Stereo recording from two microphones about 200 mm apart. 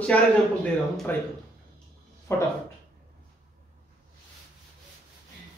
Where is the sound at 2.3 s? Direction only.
15° left (ahead or behind).